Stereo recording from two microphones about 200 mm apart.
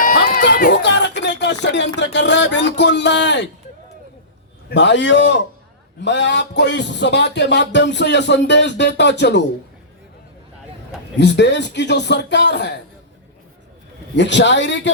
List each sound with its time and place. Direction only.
0.0 s a sound: 45° left (ahead or behind); by 3.5 s 65° left (ahead or behind)
4.7 s speech: 60° left (ahead or behind)
11.2 s speech: 60° left (ahead or behind)
14.2 s speech: 60° left (ahead or behind)